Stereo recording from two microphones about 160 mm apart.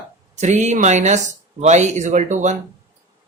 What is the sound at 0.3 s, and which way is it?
A man's voice, 45° right (ahead or behind).